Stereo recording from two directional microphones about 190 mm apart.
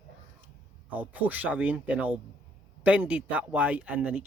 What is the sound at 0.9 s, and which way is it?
Speech, 10° right (ahead or behind).